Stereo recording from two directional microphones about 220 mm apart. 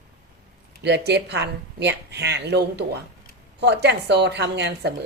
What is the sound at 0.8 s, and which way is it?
A woman's voice, 50° right (ahead or behind).